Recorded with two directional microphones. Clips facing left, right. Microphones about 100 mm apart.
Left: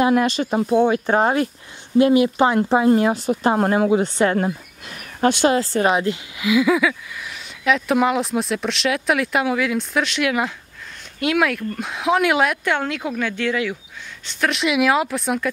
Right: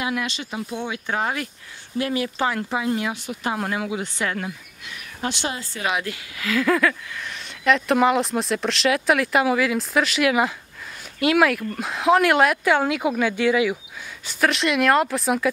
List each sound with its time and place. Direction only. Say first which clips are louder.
0.0 s speech: left 10 dB; 40° left (ahead or behind)
2.0 s speech: left 9 dB; 25° left (ahead or behind)
2.7 s speech: left 9 dB; 40° left (ahead or behind)
5.2 s speech: left 10 dB; 50° left (ahead or behind)
5.5 s speech: left 13 dB; 75° left (ahead or behind)
5.8 s speech: left 3 dB; 35° left (ahead or behind)
6.0 s speech: left 7 dB; 15° left (ahead or behind); by 15.5 s centre (ahead or behind)